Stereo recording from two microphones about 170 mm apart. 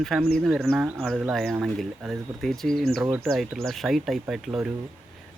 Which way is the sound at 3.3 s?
Centre (ahead or behind).